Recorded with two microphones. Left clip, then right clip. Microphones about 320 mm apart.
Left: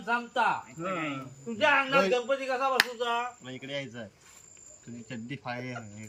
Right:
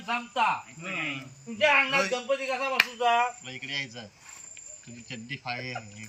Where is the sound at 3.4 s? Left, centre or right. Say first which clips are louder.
Right 3 dB; centre.